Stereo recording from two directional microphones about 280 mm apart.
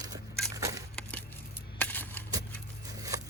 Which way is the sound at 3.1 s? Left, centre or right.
Centre.